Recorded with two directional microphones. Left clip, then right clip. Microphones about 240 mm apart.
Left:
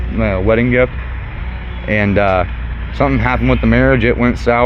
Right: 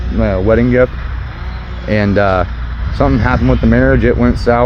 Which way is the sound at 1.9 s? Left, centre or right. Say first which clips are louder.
Right 1 dB; centre.